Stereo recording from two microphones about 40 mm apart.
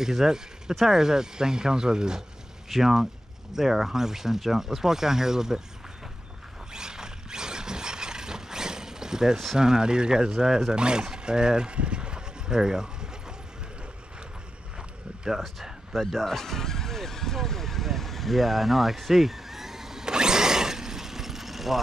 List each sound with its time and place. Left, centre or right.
0.0 s speech: centre
6.7 s a sound: centre
9.6 s speech: centre
16.0 s neigh: centre